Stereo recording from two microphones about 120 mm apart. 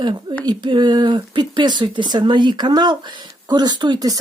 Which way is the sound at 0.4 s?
40° right (ahead or behind).